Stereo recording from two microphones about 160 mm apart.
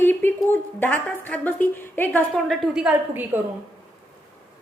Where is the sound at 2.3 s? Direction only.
Centre (ahead or behind).